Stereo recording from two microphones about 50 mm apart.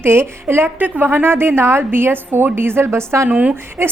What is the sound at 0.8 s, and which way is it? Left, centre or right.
A woman's voice, right.